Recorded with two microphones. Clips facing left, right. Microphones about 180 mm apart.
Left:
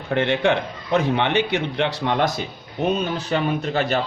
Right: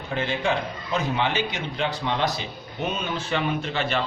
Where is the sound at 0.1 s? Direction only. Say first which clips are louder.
Left 6 dB; 70° left (ahead or behind).